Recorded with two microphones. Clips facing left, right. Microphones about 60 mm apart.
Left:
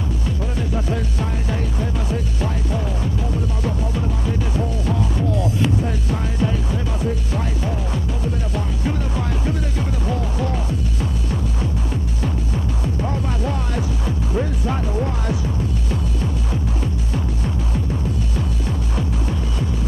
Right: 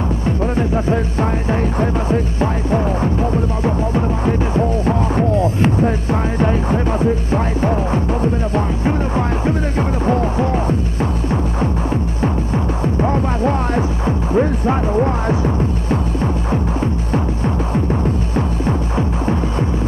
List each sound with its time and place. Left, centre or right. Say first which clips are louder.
1.5 s music: right 7 dB; right
12.8 s music: right 8 dB; right
18.7 s music: right 6 dB; right